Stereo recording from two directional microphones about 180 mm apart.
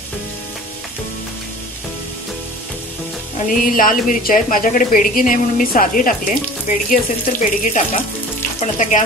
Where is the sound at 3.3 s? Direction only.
50° left (ahead or behind).